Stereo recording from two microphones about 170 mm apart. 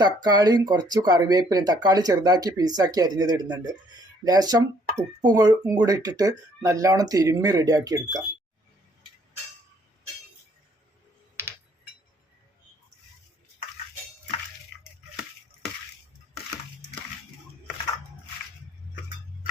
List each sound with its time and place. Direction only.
0.0 s speech: 25° right (ahead or behind)